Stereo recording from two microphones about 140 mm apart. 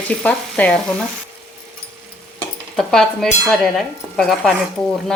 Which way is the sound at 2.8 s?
5° left (ahead or behind).